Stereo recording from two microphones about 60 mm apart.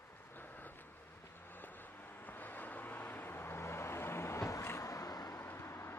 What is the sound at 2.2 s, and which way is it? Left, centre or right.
Vehicle, left.